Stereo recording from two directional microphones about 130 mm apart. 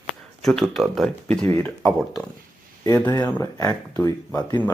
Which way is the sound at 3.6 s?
25° left (ahead or behind).